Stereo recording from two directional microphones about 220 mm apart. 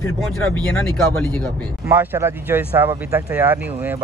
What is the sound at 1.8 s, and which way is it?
Speech, 10° right (ahead or behind).